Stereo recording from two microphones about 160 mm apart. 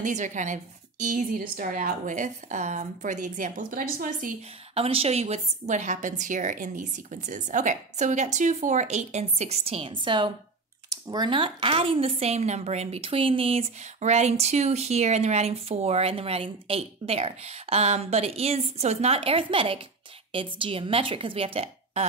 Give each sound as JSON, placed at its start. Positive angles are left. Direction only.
{"t": 0.0, "sound": "a woman's voice", "side_deg": -50}
{"t": 4.7, "sound": "a woman's voice", "side_deg": -35}